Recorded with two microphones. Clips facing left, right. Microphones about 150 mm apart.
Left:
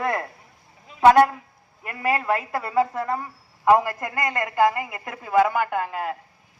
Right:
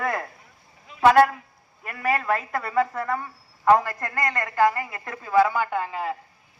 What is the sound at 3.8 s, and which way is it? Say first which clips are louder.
A man's voice: left 2 dB; 20° left (ahead or behind).